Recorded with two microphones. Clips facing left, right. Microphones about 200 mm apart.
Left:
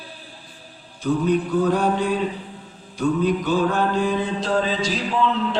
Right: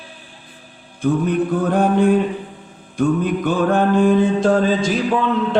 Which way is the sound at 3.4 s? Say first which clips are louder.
Right 4 dB; 55° right (ahead or behind).